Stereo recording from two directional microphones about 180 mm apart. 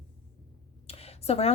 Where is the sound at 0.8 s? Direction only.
35° left (ahead or behind).